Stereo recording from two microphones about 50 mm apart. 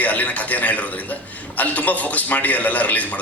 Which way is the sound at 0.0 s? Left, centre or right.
Left.